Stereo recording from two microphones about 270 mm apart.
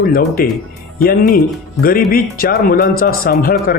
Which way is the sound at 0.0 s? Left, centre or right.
Left.